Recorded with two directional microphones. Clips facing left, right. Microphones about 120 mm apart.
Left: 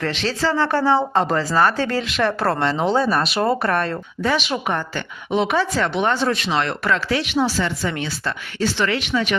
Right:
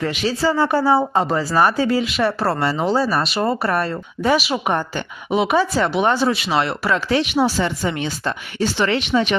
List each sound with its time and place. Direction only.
0.0 s speech: 10° right (ahead or behind)